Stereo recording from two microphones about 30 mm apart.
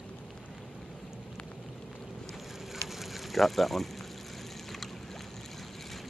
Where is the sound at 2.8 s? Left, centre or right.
Centre.